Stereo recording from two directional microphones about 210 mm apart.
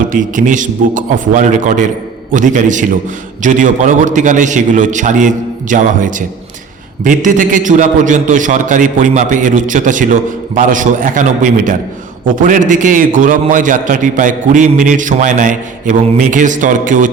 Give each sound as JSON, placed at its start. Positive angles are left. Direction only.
{"t": 0.1, "sound": "a man's voice", "side_deg": -40}